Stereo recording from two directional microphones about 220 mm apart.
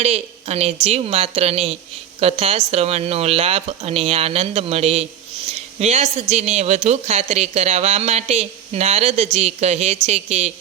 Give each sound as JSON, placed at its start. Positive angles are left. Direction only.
{"t": 0.0, "sound": "a woman's voice", "side_deg": -30}